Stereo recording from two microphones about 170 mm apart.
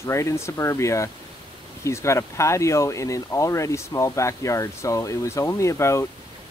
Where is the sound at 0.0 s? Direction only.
15° left (ahead or behind).